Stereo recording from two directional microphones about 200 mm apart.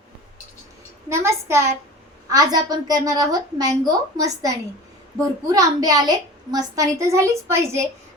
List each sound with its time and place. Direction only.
1.1 s a woman's voice: 15° right (ahead or behind)